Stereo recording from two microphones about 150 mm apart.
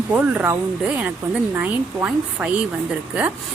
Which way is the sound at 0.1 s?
10° right (ahead or behind).